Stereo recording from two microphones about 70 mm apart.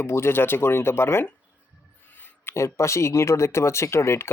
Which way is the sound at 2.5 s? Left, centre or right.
Left.